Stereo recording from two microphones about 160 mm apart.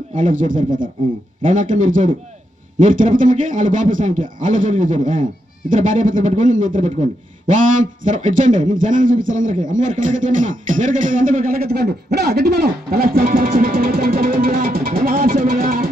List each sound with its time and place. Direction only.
0.1 s speech: 55° right (ahead or behind)